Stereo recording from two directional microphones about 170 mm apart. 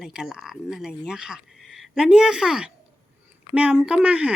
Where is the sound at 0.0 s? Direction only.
5° right (ahead or behind).